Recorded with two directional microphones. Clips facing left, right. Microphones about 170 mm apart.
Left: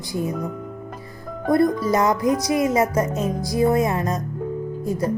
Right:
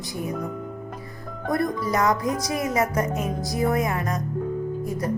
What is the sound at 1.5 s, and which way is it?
Speech, 25° left (ahead or behind).